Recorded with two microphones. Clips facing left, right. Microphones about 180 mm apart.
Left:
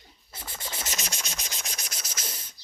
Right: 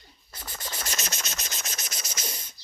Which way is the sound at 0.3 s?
25° left (ahead or behind).